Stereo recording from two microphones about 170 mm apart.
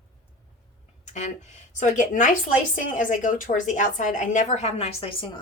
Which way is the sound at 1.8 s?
45° left (ahead or behind).